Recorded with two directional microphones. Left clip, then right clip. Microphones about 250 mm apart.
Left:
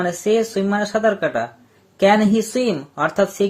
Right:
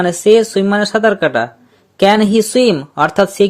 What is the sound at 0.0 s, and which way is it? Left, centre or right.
Speech, right.